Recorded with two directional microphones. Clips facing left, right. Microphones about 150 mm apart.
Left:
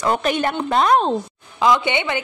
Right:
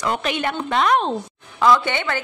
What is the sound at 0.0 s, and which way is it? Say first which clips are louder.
A woman's voice: left 3 dB; 40° left (ahead or behind).